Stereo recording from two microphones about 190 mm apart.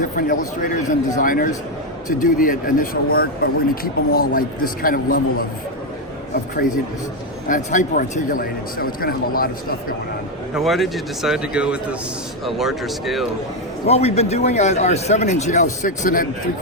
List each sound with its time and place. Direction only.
0.0 s a man's voice: 45° left (ahead or behind)
7.4 s a man's voice: 45° left (ahead or behind)
10.5 s speech: centre (ahead or behind)
13.8 s speech: 35° left (ahead or behind)